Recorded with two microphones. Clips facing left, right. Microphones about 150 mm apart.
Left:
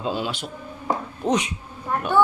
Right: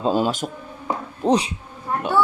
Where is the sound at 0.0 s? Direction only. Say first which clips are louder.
Right 6 dB; 45° right (ahead or behind).